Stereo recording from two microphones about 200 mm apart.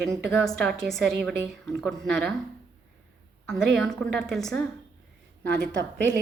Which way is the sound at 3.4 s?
Centre (ahead or behind).